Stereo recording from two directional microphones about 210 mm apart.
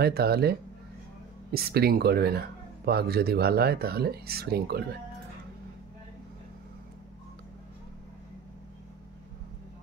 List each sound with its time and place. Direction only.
0.0 s speech: 50° right (ahead or behind)